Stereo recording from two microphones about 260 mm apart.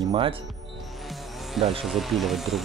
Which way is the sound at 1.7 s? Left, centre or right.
Centre.